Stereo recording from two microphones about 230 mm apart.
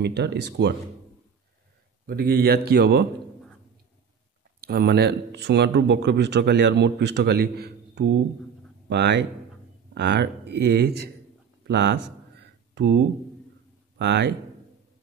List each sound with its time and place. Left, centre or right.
0.0 s a man's voice: right
2.0 s a man's voice: right
4.6 s a man's voice: right